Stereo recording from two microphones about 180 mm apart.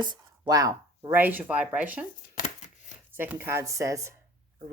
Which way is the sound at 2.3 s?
40° left (ahead or behind).